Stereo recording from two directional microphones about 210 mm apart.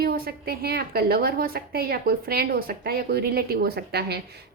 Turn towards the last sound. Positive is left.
turn(degrees=-50)  # may be behind; listen again after turning